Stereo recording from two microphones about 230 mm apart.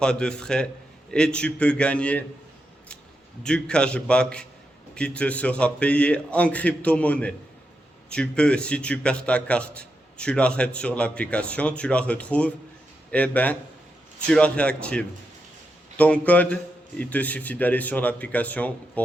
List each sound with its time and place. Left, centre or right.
0.0 s a man's voice: centre
3.4 s a man's voice: centre